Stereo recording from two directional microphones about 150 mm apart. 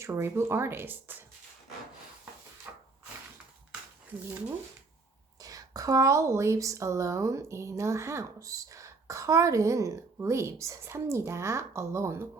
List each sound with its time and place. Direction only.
0.0 s speech: 15° right (ahead or behind)
2.7 s wood: 15° right (ahead or behind)
5.4 s a woman's voice: 25° right (ahead or behind)